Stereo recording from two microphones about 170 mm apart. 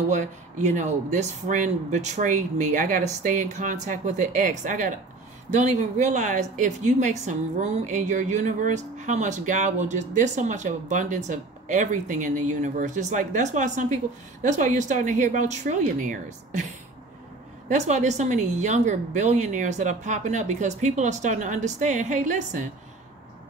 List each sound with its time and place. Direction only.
0.1 s speech: 45° right (ahead or behind)
17.6 s speech: 45° right (ahead or behind)